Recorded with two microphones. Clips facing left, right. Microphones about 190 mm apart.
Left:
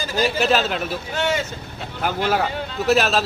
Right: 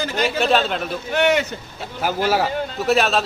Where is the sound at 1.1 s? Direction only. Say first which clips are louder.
Right 6 dB; 65° right (ahead or behind).